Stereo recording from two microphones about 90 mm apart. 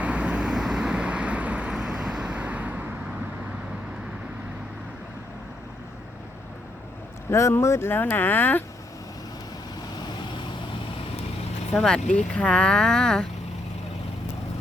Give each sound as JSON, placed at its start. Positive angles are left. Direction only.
{"t": 0.0, "sound": "vehicle", "side_deg": -15}
{"t": 7.3, "sound": "speech", "side_deg": 30}
{"t": 11.7, "sound": "speech", "side_deg": 5}